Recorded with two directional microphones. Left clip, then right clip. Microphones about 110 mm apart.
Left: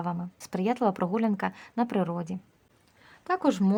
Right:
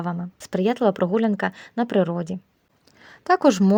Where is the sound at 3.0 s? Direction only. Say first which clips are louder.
Right 10 dB; 80° right.